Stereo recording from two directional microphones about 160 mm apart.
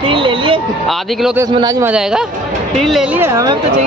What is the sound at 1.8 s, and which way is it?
Speech, 5° right (ahead or behind).